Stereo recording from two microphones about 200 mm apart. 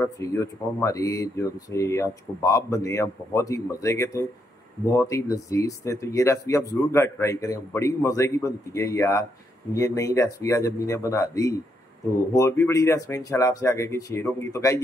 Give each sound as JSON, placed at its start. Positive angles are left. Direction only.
{"t": 0.0, "sound": "speech", "side_deg": 15}